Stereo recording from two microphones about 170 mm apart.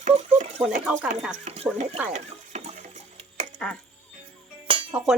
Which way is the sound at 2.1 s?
45° right (ahead or behind).